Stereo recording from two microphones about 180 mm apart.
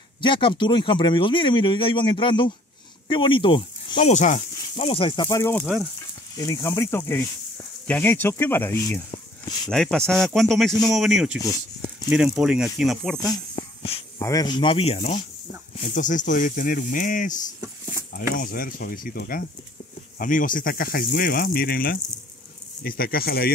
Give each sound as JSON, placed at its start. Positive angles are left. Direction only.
{"t": 0.2, "sound": "speech", "side_deg": 25}
{"t": 4.1, "sound": "speech", "side_deg": 45}
{"t": 5.4, "sound": "speech", "side_deg": 10}
{"t": 9.1, "sound": "a sound", "side_deg": 25}
{"t": 9.7, "sound": "speech", "side_deg": 5}
{"t": 13.6, "sound": "wheeze", "side_deg": 30}
{"t": 14.1, "sound": "speech", "side_deg": 20}